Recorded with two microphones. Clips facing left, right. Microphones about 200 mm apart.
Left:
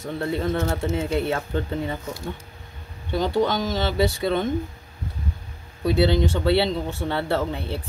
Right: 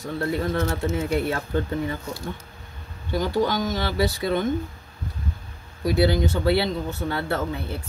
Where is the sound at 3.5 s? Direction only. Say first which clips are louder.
Left 1 dB; 25° left (ahead or behind).